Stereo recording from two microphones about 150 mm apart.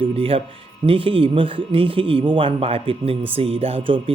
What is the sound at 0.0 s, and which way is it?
Speech, 40° right (ahead or behind).